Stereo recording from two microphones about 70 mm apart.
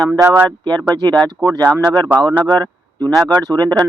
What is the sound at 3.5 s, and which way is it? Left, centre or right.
Speech, right.